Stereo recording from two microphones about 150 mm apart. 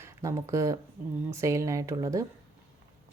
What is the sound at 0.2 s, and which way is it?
Speech, 20° right (ahead or behind).